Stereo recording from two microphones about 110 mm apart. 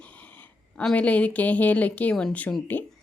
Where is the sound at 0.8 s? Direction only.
10° left (ahead or behind).